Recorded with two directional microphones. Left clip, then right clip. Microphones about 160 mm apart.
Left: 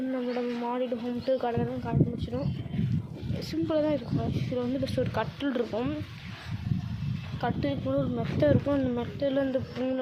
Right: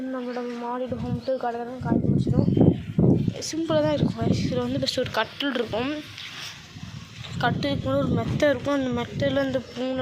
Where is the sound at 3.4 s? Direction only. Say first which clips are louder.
Right 3 dB; 5° right (ahead or behind).